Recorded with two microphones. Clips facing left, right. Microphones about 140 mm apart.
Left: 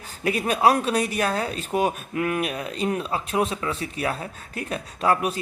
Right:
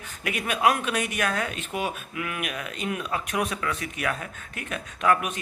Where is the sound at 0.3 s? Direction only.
35° left (ahead or behind).